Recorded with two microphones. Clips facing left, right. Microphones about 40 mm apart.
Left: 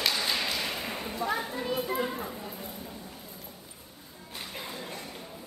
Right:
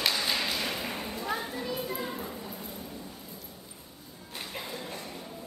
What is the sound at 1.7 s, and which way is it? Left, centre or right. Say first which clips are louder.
Children playing: left 6 dB; left.